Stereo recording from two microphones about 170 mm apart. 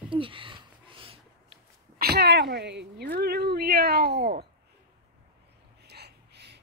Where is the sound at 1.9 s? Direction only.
65° right (ahead or behind).